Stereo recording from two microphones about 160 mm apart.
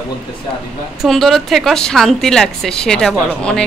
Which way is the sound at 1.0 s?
Centre (ahead or behind).